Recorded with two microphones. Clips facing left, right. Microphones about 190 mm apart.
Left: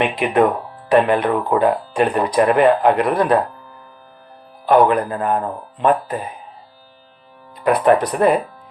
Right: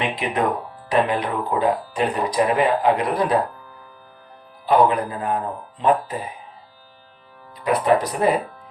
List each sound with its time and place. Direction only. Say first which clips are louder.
0.0 s speech: left 6 dB; 60° left (ahead or behind)
4.6 s speech: left 3 dB; 60° left (ahead or behind)
7.6 s speech: left 4 dB; 60° left (ahead or behind)